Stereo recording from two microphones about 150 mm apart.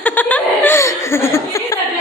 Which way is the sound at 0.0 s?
10° left (ahead or behind).